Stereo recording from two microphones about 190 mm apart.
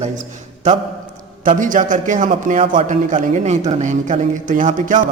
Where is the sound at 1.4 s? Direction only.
45° right (ahead or behind).